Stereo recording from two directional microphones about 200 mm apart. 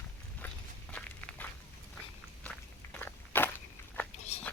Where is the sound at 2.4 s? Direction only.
5° left (ahead or behind).